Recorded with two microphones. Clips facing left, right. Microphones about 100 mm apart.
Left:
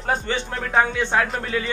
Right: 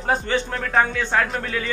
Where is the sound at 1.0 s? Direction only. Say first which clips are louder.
Even; 20° left (ahead or behind).